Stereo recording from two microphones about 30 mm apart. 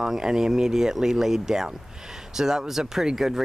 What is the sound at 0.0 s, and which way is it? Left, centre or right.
Speech, centre.